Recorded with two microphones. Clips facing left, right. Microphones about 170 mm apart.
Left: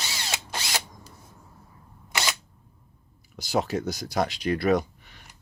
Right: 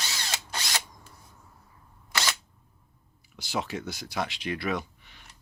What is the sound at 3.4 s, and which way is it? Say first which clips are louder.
Speech: left 6 dB; 40° left (ahead or behind).